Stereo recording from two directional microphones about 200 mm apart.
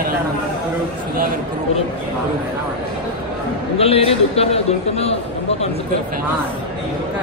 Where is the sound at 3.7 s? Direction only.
30° left (ahead or behind).